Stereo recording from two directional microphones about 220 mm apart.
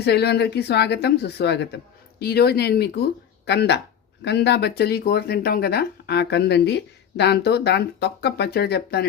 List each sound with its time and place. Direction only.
0.0 s speech: 50° left (ahead or behind)